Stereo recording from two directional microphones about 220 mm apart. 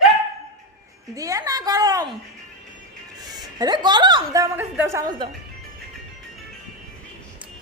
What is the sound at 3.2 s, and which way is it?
A woman's voice, 20° right (ahead or behind).